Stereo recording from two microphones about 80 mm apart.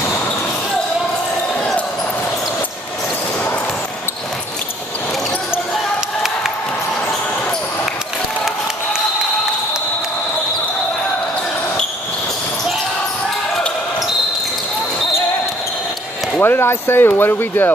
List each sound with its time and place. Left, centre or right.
16.3 s speech: left